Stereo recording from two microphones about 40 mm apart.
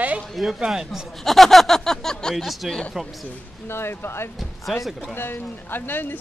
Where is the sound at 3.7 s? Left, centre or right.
Left.